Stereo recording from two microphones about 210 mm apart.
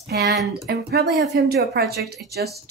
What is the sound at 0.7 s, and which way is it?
Speech, 50° right (ahead or behind).